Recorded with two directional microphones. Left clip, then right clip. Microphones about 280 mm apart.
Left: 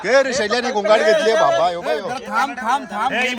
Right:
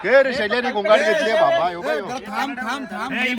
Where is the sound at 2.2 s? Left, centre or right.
Left.